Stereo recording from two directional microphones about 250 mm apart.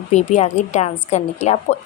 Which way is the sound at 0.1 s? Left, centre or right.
Left.